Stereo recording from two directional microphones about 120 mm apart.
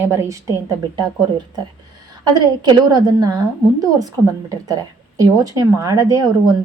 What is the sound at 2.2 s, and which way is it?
A woman's voice, 35° right (ahead or behind).